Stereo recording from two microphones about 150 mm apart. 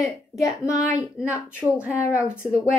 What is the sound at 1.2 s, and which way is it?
Speech, 5° right (ahead or behind).